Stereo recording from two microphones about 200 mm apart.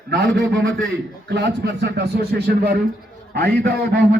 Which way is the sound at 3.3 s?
50° right (ahead or behind).